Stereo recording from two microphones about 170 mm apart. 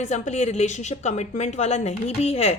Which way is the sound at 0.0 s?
45° left (ahead or behind).